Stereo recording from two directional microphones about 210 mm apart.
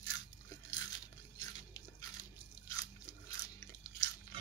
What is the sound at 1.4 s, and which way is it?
Biting, 15° left (ahead or behind).